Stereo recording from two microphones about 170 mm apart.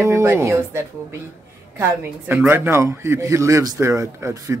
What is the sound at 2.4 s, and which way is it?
A man's voice, 15° right (ahead or behind).